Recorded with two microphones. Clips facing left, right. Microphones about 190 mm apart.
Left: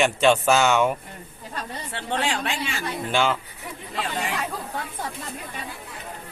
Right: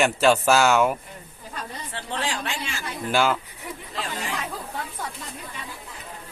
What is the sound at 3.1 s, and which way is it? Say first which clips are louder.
Speech: right 1 dB; 5° right (ahead or behind).